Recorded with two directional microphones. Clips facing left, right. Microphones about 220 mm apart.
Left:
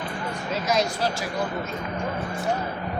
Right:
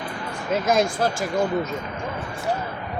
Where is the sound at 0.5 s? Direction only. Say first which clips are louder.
Right 5 dB; 50° right (ahead or behind).